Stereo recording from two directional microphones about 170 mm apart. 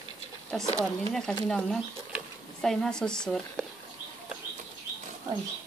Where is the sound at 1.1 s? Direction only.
5° left (ahead or behind).